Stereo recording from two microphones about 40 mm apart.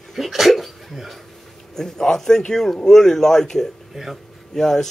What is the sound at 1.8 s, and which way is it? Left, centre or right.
Speech, centre.